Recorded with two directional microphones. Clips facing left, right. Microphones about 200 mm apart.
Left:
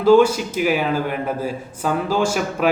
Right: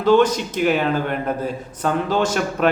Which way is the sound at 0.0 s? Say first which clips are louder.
Left 2 dB; 10° left (ahead or behind).